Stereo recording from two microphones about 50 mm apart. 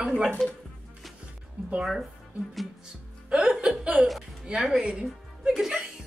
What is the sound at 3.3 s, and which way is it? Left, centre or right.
Speech, centre.